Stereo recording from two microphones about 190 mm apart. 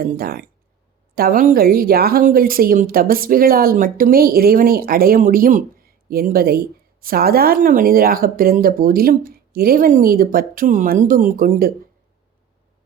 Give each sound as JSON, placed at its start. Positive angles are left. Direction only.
{"t": 0.0, "sound": "a woman's voice", "side_deg": -50}